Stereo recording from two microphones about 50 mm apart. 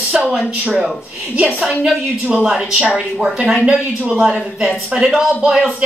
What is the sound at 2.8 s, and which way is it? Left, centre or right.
Speech, right.